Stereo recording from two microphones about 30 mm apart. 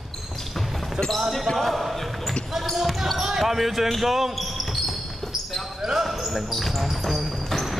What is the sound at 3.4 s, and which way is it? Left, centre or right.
Speech, centre.